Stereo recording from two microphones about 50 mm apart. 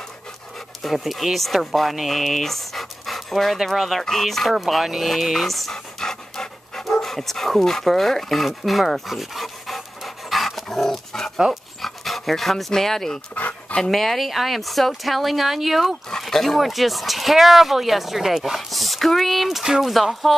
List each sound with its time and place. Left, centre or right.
0.8 s speech: centre
4.6 s pant: centre
11.8 s speech: centre
13.3 s dog: left
13.8 s speech: centre